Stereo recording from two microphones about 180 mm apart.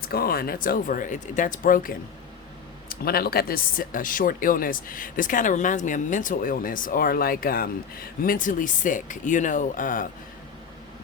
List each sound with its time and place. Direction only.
0.1 s speech: 55° left (ahead or behind)